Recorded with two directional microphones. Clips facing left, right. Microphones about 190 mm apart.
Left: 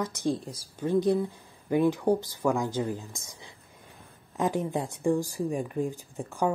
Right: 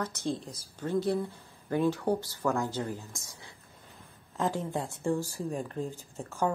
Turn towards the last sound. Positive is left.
turn(degrees=15)  # may be behind; listen again after turning